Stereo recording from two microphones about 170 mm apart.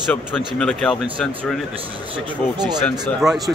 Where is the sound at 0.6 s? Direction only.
5° left (ahead or behind).